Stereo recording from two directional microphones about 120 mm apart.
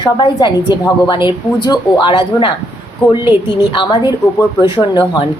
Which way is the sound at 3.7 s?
45° left (ahead or behind).